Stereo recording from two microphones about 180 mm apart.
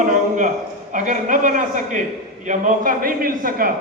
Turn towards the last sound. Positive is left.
turn(degrees=-50)  # may be behind; listen again after turning